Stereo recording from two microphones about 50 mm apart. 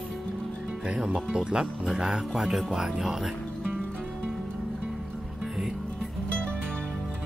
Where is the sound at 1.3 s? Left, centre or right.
Centre.